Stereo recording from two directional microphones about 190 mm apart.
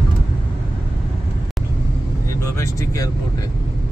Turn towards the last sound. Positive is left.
turn(degrees=15)  # may be behind; listen again after turning